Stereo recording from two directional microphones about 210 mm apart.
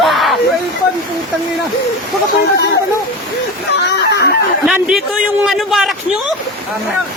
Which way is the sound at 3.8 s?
50° left (ahead or behind).